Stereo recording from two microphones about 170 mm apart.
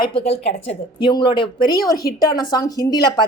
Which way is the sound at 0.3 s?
35° left (ahead or behind).